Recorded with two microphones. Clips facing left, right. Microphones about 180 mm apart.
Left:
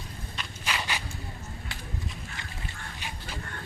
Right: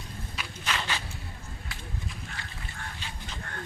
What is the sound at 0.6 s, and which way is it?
Walk, 10° left (ahead or behind).